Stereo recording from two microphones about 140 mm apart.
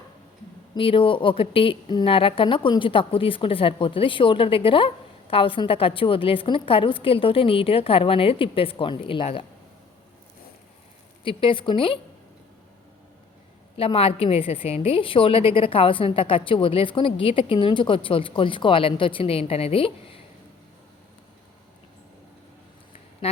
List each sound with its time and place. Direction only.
0.8 s a woman's voice: 40° left (ahead or behind)
11.2 s a woman's voice: 40° left (ahead or behind)
13.7 s a woman's voice: 40° left (ahead or behind)
23.2 s a sound: 45° left (ahead or behind)